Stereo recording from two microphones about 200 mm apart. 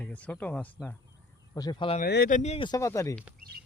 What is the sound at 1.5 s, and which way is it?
Speech, 20° left (ahead or behind).